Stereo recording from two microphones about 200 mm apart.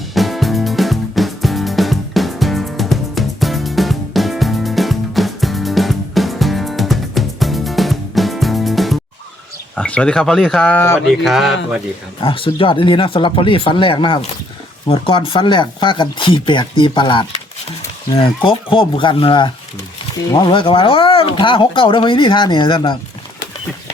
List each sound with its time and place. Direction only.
0.1 s music: centre (ahead or behind)
9.7 s speech: 5° left (ahead or behind)
11.1 s mantra: centre (ahead or behind)
12.2 s speech: 25° left (ahead or behind)
18.4 s speech: 25° left (ahead or behind)